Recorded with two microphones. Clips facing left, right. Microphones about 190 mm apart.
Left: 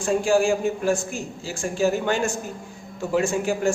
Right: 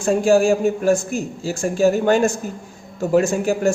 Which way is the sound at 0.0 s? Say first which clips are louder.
Right 5 dB; 40° right (ahead or behind).